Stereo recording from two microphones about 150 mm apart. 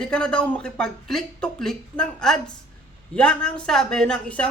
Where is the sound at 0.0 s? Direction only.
5° left (ahead or behind).